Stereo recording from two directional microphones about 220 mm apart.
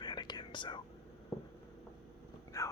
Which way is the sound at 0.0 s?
20° left (ahead or behind).